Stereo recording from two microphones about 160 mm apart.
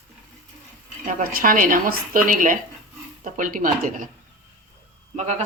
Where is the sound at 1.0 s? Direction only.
60° right (ahead or behind).